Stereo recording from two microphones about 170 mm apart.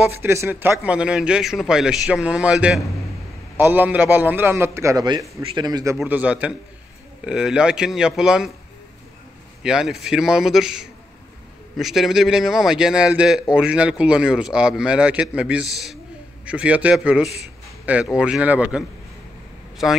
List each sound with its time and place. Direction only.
0.0 s a man's voice: 15° right (ahead or behind)
6.0 s a man's voice: 10° right (ahead or behind)
9.6 s a man's voice: 5° right (ahead or behind)